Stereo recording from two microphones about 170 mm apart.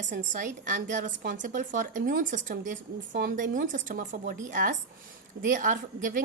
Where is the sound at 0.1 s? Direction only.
50° right (ahead or behind).